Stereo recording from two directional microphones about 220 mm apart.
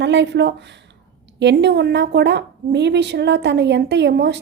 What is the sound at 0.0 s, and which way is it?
A woman's voice, 55° right (ahead or behind).